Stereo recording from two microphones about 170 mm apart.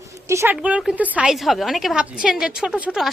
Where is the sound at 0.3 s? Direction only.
15° right (ahead or behind).